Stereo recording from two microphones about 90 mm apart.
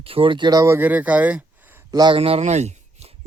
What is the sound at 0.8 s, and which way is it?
Speech, 15° right (ahead or behind).